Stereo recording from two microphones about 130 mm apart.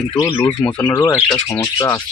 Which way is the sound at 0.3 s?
15° left (ahead or behind).